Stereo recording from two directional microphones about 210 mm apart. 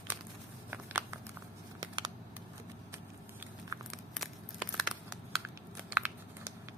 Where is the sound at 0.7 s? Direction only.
10° right (ahead or behind).